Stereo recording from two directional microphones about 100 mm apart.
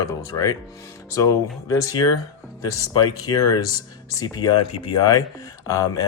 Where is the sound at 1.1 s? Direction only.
30° left (ahead or behind).